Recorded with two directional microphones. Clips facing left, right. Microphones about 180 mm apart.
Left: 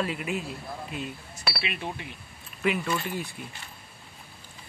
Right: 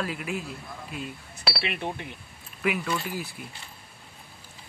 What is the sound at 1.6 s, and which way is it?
Speech, 55° right (ahead or behind).